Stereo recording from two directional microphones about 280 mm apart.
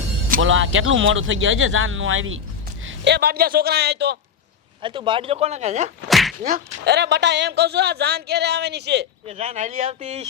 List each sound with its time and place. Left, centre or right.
0.4 s speech: right
4.8 s speech: centre
6.1 s a sound: centre
6.8 s speech: right
9.2 s speech: right